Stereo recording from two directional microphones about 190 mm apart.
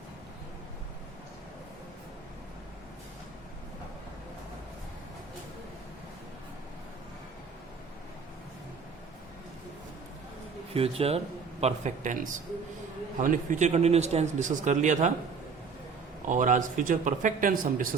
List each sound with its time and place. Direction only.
10.8 s a man's voice: 30° right (ahead or behind)
16.2 s speech: 40° right (ahead or behind)